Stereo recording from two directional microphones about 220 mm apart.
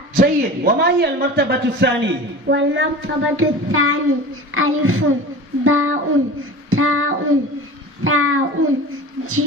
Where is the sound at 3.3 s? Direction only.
70° right (ahead or behind).